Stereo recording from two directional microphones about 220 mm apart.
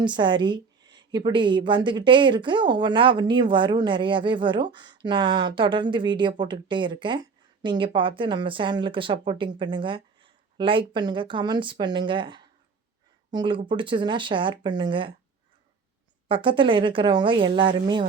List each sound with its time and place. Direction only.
0.0 s a woman's voice: 20° right (ahead or behind)
16.3 s a woman's voice: 25° right (ahead or behind)